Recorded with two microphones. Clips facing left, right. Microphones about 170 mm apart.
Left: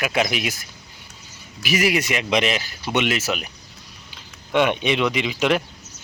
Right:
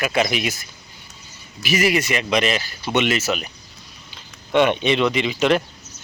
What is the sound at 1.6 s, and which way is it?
Speech, 10° left (ahead or behind).